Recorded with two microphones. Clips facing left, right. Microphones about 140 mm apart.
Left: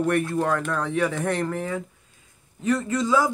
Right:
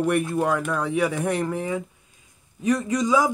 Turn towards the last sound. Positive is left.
turn(degrees=-15)  # may be behind; listen again after turning